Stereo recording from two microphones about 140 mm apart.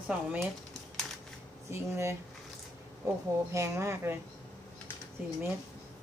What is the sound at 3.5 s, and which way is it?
Speech, 20° right (ahead or behind).